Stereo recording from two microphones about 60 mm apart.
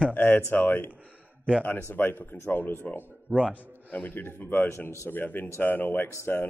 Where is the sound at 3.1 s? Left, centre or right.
Right.